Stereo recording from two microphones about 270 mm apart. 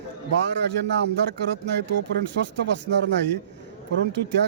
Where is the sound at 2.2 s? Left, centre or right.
Right.